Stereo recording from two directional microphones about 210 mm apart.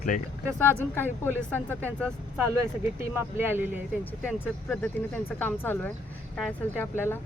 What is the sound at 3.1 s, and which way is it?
Speech, 10° right (ahead or behind).